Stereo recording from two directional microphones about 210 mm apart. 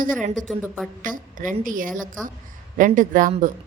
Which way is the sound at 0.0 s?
40° right (ahead or behind).